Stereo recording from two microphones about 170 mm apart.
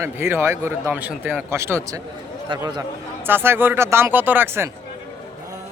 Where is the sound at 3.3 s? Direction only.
15° right (ahead or behind).